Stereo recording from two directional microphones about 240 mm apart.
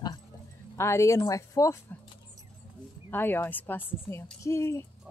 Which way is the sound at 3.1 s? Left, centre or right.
Centre.